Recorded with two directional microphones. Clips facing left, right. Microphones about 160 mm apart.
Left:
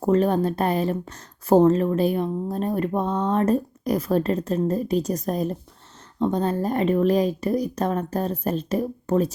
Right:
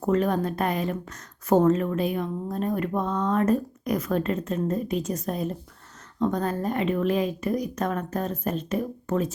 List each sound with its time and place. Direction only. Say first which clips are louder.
0.0 s a woman's voice: left 4 dB; 30° left (ahead or behind)